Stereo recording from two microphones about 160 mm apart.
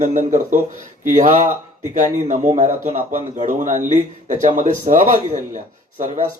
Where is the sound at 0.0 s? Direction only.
50° right (ahead or behind).